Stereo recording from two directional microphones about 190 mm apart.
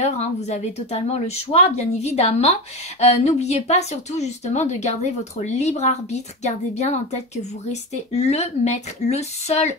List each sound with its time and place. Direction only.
0.0 s a woman's voice: 35° left (ahead or behind)